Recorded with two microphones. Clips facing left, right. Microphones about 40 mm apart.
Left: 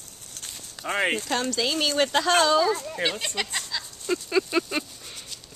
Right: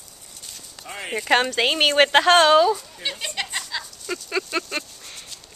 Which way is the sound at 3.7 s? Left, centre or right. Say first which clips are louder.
Right 3 dB; centre.